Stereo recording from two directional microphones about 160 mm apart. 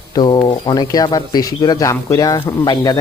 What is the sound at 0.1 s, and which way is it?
Speech, 25° left (ahead or behind).